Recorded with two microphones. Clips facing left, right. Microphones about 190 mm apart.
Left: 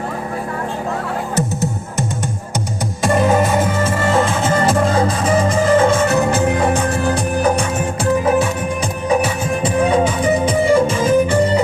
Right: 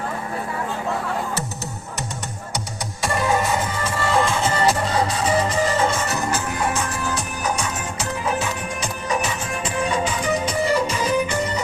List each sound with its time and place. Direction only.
3.8 s music: 45° left (ahead or behind)